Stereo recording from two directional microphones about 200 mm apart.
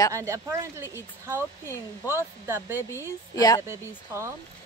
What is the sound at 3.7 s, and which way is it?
Speech, 15° right (ahead or behind).